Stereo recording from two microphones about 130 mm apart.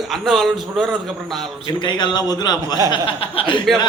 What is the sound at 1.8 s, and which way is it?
A man's voice, 35° left (ahead or behind).